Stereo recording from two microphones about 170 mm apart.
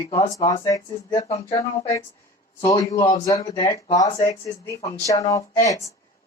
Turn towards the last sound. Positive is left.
turn(degrees=20)  # may be behind; listen again after turning